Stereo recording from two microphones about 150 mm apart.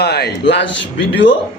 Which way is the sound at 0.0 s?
90° left.